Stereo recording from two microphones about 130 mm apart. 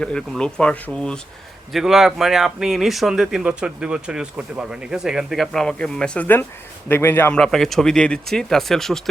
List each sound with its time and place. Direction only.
0.0 s speech: 5° left (ahead or behind)
1.7 s speech: 5° right (ahead or behind); by 7.3 s 15° left (ahead or behind)
7.3 s speech: 5° left (ahead or behind)